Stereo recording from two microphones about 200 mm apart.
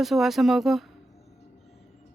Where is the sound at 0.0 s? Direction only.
Centre (ahead or behind).